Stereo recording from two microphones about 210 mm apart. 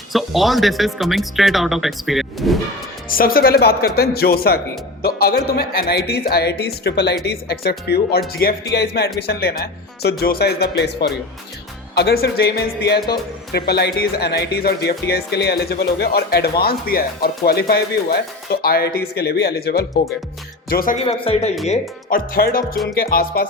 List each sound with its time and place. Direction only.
0.1 s speech: centre (ahead or behind)
3.1 s speech: 45° left (ahead or behind)
21.0 s speech: 30° left (ahead or behind)
21.7 s speech: 45° left (ahead or behind)